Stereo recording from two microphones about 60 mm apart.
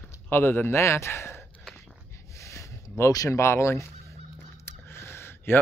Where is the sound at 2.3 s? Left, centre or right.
Left.